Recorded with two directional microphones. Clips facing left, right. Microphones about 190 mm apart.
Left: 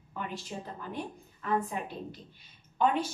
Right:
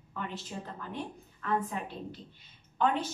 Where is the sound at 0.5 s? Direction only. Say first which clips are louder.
Left 2 dB; 20° left (ahead or behind).